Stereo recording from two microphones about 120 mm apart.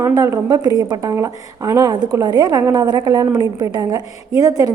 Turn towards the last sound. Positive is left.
turn(degrees=-30)  # may be behind; listen again after turning